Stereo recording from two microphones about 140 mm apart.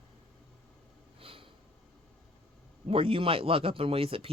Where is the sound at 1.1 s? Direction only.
40° right (ahead or behind).